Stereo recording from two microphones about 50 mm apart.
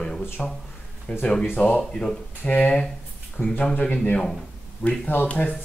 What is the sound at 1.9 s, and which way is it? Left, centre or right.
Speech, centre.